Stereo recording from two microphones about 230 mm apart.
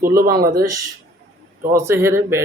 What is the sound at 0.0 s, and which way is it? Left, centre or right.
Speech, right.